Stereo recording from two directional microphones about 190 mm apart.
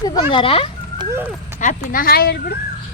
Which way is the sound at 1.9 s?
50° left (ahead or behind).